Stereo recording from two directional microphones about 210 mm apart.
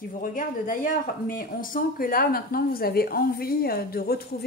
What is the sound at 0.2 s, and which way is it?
Speech, 40° left (ahead or behind).